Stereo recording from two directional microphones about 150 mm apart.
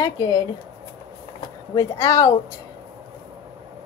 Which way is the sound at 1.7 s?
25° left (ahead or behind).